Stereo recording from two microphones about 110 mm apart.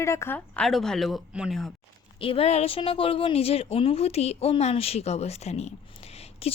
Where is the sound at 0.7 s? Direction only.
5° left (ahead or behind).